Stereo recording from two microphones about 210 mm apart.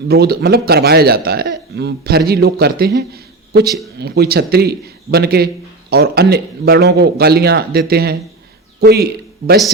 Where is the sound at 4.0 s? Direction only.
50° right (ahead or behind).